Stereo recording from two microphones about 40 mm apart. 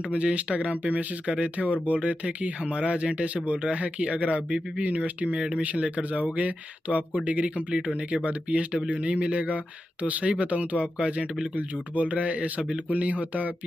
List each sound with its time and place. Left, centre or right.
0.1 s speech: right